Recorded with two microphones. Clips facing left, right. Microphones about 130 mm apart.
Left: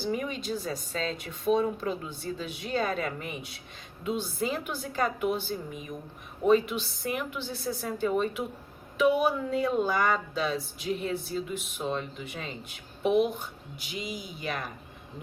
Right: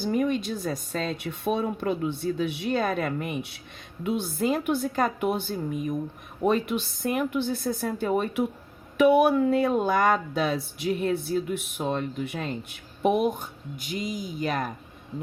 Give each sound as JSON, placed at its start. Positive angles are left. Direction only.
{"t": 0.0, "sound": "speech", "side_deg": -50}